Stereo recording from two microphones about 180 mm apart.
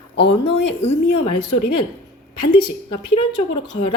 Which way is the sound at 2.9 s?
25° left (ahead or behind).